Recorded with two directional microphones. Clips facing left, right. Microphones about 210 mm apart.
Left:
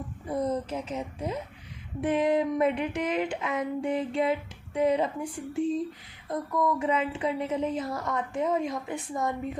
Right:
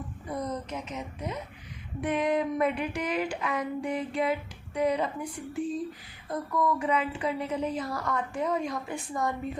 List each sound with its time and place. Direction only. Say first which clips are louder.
0.3 s a woman's voice: left 5 dB; 30° left (ahead or behind)